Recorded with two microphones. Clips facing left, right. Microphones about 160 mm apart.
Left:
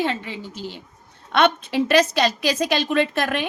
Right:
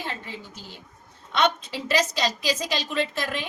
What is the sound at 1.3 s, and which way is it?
A woman's voice, 60° left (ahead or behind).